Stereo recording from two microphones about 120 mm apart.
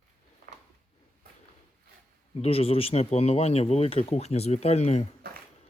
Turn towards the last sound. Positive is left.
turn(degrees=65)  # may be behind; listen again after turning